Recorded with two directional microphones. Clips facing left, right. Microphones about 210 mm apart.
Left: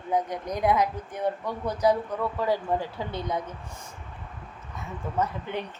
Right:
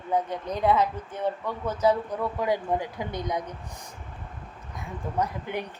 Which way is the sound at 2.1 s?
15° right (ahead or behind).